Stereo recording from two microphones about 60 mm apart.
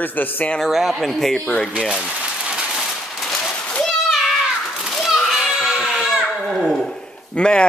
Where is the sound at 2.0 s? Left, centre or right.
Centre.